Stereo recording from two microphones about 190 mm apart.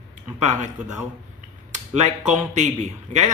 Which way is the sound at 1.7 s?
40° right (ahead or behind).